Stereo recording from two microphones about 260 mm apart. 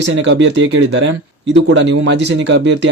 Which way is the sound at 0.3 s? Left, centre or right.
Right.